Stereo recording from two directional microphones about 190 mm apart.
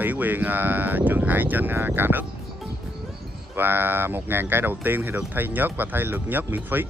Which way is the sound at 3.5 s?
10° right (ahead or behind).